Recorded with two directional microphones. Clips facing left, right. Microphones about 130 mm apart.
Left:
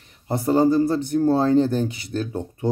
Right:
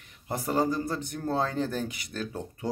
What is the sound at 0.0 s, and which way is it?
Speech, 30° left (ahead or behind).